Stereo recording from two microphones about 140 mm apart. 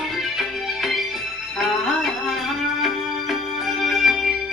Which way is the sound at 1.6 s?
Centre (ahead or behind).